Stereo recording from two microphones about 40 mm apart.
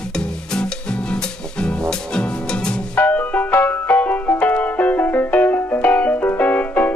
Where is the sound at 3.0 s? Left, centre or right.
Left.